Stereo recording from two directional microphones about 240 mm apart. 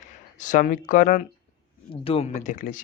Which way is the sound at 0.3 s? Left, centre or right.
Left.